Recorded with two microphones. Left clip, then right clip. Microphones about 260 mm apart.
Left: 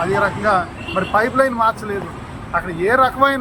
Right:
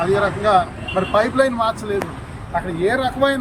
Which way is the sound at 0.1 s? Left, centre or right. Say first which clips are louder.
Right 2 dB; centre.